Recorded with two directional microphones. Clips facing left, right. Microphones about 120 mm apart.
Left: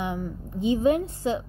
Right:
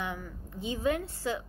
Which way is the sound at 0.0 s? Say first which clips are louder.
Left 7 dB; 20° left (ahead or behind).